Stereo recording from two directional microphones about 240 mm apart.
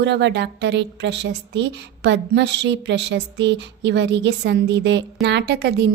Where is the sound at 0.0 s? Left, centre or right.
Right.